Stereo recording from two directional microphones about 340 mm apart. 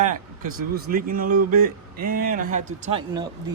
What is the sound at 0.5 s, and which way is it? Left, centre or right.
Speech, right.